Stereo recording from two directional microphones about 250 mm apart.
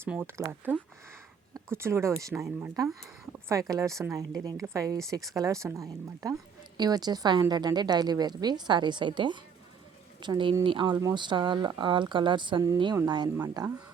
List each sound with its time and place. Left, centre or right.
0.0 s a woman's voice: centre